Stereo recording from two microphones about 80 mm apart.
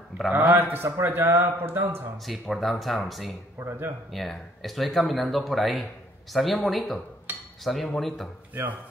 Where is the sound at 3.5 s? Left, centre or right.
Right.